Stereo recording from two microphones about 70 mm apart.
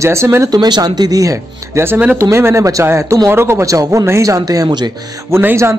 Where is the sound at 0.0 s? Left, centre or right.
Right.